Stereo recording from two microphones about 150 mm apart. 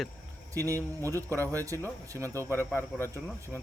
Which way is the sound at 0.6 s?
20° right (ahead or behind).